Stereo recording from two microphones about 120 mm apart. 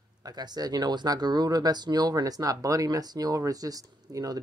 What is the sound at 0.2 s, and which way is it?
Speech, 35° right (ahead or behind).